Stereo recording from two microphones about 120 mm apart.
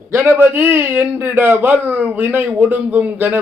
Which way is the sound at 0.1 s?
20° right (ahead or behind).